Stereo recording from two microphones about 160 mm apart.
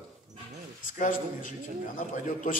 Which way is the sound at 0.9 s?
55° left (ahead or behind).